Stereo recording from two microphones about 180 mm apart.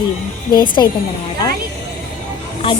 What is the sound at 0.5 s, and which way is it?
Speech, 25° left (ahead or behind).